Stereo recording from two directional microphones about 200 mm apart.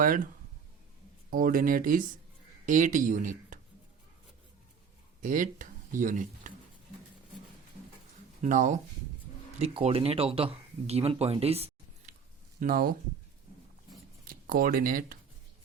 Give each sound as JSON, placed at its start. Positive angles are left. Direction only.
{"t": 0.0, "sound": "speech", "side_deg": -45}
{"t": 1.3, "sound": "speech", "side_deg": -45}
{"t": 5.2, "sound": "speech", "side_deg": -40}
{"t": 8.4, "sound": "speech", "side_deg": -40}
{"t": 12.5, "sound": "speech", "side_deg": -45}
{"t": 14.3, "sound": "speech", "side_deg": -45}